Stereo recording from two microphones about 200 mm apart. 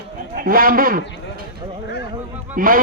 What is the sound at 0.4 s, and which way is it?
Speech, 45° right (ahead or behind).